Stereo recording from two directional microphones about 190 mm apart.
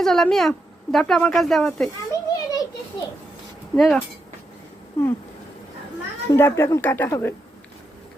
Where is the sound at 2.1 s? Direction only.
20° left (ahead or behind).